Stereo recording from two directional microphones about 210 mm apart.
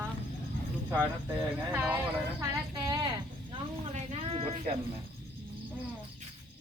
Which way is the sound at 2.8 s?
20° right (ahead or behind).